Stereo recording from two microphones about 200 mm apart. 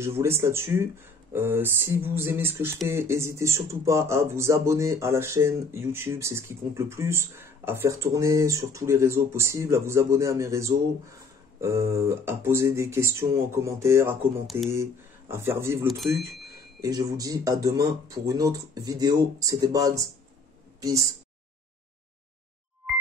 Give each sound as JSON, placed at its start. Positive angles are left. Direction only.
{"t": 0.0, "sound": "speech", "side_deg": -10}